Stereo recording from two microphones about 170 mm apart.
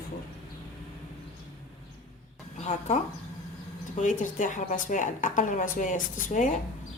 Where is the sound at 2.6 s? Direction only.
40° left (ahead or behind).